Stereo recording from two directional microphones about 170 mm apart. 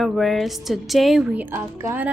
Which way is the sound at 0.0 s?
Centre (ahead or behind).